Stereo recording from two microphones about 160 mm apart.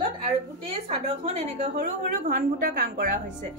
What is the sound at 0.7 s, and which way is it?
A woman's voice, 40° right (ahead or behind).